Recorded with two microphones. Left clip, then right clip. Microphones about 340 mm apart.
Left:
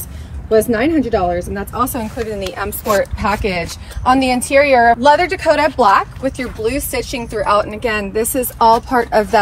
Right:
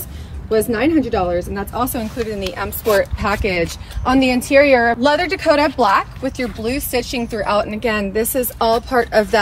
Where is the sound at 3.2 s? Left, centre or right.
Left.